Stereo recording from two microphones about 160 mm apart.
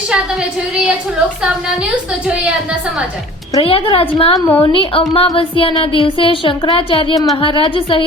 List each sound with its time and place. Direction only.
3.6 s speech: 35° left (ahead or behind)
4.4 s a woman's voice: 15° left (ahead or behind)
4.7 s speech: 35° left (ahead or behind)